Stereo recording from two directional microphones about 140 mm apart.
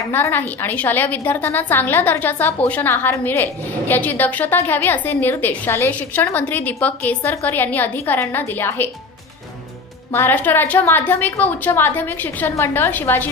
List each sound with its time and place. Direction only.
0.1 s a woman's voice: 15° left (ahead or behind)
10.1 s a woman's voice: 15° left (ahead or behind)